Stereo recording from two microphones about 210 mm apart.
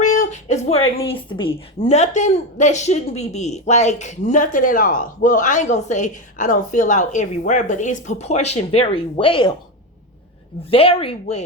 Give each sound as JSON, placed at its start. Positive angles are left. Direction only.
{"t": 0.0, "sound": "a sound", "side_deg": 35}
{"t": 0.9, "sound": "a woman's voice", "side_deg": 25}
{"t": 10.6, "sound": "speech", "side_deg": 25}